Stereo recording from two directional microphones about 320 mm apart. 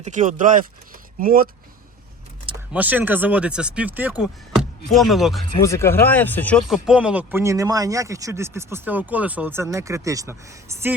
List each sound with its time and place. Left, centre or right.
0.0 s speech: right
2.7 s speech: centre